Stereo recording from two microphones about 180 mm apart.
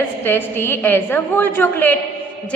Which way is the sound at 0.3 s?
10° left (ahead or behind).